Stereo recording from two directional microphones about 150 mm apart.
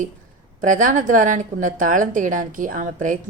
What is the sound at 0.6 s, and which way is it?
A woman's voice, 60° right (ahead or behind).